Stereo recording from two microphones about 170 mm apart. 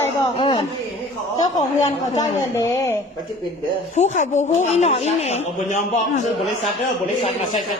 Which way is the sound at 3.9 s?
45° left (ahead or behind).